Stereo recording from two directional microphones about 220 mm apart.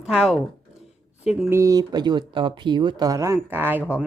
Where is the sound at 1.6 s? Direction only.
15° right (ahead or behind).